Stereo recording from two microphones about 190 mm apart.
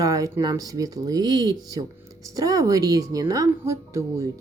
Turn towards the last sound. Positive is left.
turn(degrees=-15)  # may be behind; listen again after turning